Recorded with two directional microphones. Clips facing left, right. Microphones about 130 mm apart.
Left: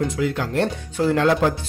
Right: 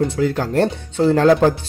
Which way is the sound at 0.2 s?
35° right (ahead or behind).